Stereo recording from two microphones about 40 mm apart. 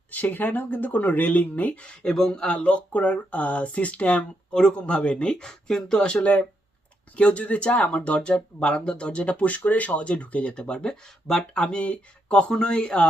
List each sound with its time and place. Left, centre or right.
0.1 s speech: left
1.8 s speech: left
2.6 s speech: left
4.5 s speech: left
7.2 s speech: left; by 11.4 s centre
11.5 s speech: left